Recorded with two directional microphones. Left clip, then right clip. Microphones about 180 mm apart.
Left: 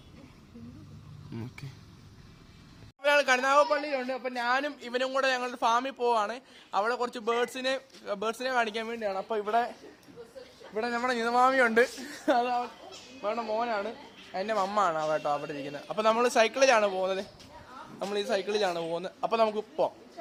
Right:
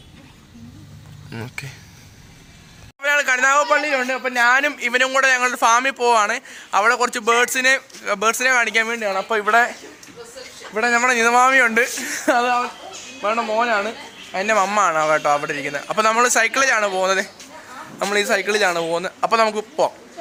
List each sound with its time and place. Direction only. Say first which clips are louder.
1.3 s speech: right 12 dB; 5° left (ahead or behind)
3.0 s a man's voice: right 7 dB; 10° right (ahead or behind)
10.8 s a man's voice: right 13 dB; 15° right (ahead or behind)
15.3 s a man's voice: right 12 dB; 15° right (ahead or behind)